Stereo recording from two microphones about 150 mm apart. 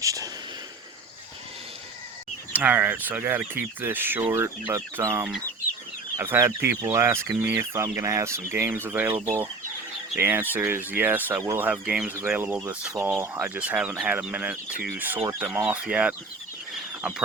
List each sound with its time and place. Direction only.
0.0 s a sound: 20° right (ahead or behind)
2.5 s speech: 10° right (ahead or behind)
13.0 s speech: 15° right (ahead or behind)